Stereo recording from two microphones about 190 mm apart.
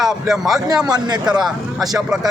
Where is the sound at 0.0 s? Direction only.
Centre (ahead or behind).